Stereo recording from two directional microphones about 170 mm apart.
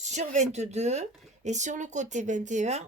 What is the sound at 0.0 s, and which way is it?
Speech, 45° right (ahead or behind).